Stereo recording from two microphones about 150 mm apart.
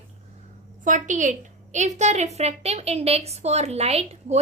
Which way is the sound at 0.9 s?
55° right (ahead or behind).